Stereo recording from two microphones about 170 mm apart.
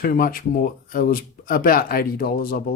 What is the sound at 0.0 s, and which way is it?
Speech, 60° left (ahead or behind).